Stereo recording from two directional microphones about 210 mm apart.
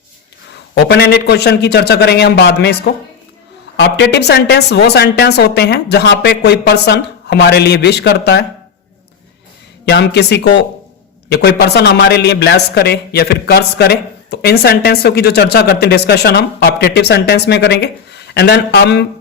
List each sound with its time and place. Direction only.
0.7 s speech: 50° left (ahead or behind)
9.8 s speech: 50° left (ahead or behind)